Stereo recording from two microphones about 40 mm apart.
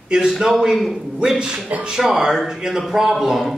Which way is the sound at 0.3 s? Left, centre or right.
Centre.